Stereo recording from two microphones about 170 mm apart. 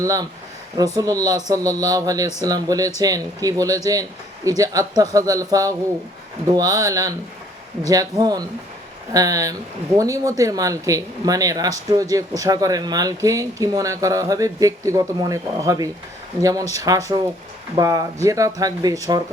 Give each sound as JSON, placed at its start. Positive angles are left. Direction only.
{"t": 0.0, "sound": "speech", "side_deg": -20}